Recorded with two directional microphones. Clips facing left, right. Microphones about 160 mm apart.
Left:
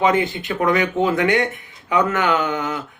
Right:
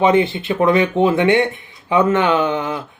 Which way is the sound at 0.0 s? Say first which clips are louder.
Right 4 dB; 25° right (ahead or behind).